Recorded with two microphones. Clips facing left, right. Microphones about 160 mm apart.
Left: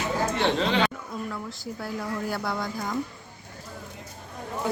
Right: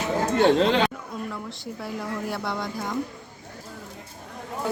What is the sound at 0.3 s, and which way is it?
Speech, 50° right (ahead or behind).